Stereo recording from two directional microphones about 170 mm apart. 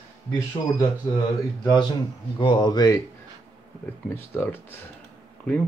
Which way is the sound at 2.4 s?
25° left (ahead or behind).